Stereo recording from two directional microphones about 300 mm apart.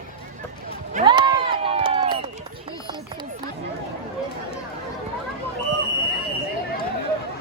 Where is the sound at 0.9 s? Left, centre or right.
Centre.